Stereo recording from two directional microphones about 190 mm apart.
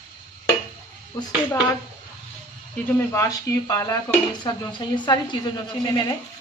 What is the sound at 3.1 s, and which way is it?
A woman's voice, 15° left (ahead or behind).